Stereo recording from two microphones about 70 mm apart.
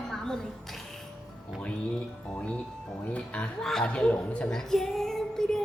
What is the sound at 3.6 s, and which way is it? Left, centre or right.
Speech, centre.